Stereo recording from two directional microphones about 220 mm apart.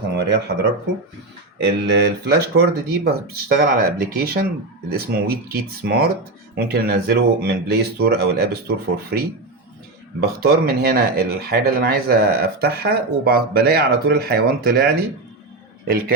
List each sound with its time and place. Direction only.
0.1 s speech: 50° right (ahead or behind)
1.5 s speech: 50° right (ahead or behind)